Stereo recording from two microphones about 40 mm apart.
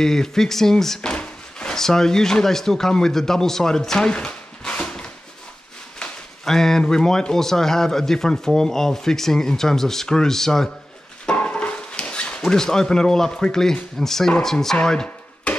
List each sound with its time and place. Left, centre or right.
0.0 s speech: centre
1.0 s drawer open or close: left
1.8 s speech: centre
6.4 s speech: centre
11.3 s a sound: left; by 13.7 s centre
13.9 s speech: centre
14.8 s a sound: left